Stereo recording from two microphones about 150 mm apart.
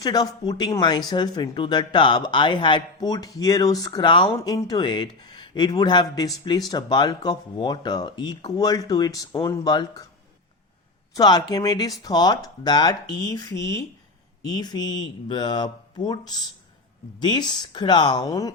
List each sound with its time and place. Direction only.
0.0 s speech: 25° left (ahead or behind)
11.1 s speech: 25° left (ahead or behind)